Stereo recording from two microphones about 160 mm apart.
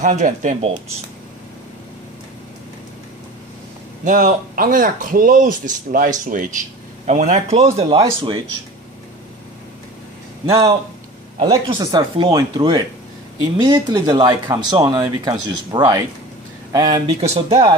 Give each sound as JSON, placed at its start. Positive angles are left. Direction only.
{"t": 0.0, "sound": "speech", "side_deg": -50}
{"t": 4.0, "sound": "speech", "side_deg": -55}
{"t": 7.9, "sound": "speech", "side_deg": -30}
{"t": 11.4, "sound": "speech", "side_deg": -20}